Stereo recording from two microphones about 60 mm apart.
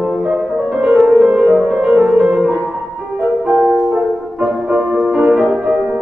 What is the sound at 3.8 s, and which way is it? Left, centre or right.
Music, centre.